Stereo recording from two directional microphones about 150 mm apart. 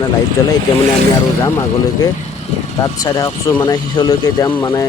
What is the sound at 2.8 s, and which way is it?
Speech, 25° left (ahead or behind).